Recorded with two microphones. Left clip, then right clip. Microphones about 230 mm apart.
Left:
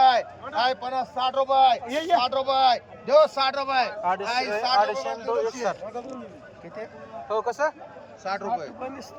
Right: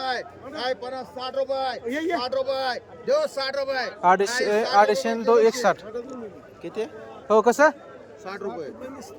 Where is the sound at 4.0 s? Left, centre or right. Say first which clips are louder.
Right 5 dB; right.